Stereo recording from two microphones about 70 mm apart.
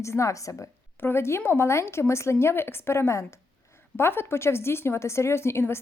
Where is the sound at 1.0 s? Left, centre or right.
Left.